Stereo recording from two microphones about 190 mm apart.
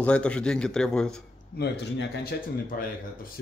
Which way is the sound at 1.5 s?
60° left (ahead or behind).